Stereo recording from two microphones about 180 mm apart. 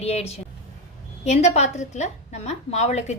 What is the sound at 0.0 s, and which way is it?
A woman's voice, 35° left (ahead or behind).